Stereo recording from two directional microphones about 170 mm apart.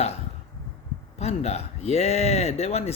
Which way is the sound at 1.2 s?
40° left (ahead or behind).